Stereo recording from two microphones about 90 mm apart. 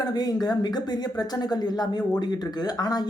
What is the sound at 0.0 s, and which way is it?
Speech, 45° left (ahead or behind).